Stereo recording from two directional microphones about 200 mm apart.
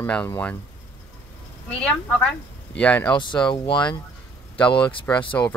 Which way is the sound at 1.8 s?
5° left (ahead or behind).